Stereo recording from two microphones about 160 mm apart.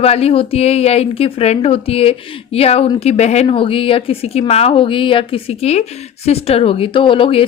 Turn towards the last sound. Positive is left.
turn(degrees=35)  # may be behind; listen again after turning